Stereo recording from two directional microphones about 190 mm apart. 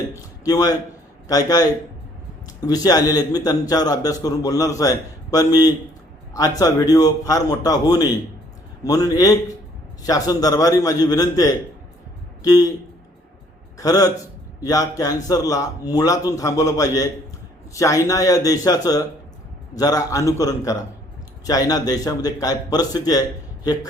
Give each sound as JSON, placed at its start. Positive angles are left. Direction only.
{"t": 0.1, "sound": "a sound", "side_deg": 20}
{"t": 1.3, "sound": "a man's voice", "side_deg": 20}
{"t": 13.7, "sound": "a man's voice", "side_deg": 20}